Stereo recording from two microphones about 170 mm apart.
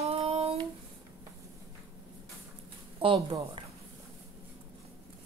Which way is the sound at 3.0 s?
30° right (ahead or behind).